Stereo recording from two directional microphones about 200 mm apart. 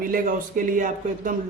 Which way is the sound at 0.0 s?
45° right (ahead or behind).